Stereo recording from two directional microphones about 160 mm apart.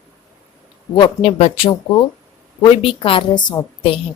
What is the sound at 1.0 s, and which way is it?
Speech, 35° left (ahead or behind).